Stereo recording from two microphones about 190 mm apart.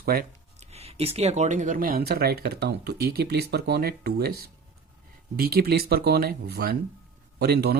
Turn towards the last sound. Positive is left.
turn(degrees=-55)  # may be behind; listen again after turning